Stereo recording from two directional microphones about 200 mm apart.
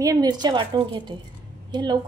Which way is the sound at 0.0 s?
20° right (ahead or behind).